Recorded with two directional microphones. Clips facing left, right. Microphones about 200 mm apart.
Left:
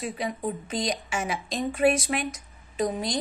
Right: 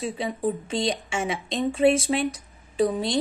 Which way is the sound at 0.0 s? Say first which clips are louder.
Right 3 dB; 30° right (ahead or behind).